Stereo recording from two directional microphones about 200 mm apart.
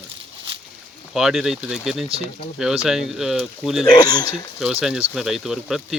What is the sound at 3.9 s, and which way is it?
Speech, 20° left (ahead or behind).